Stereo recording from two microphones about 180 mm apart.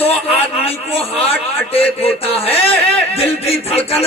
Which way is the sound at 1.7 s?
35° left (ahead or behind).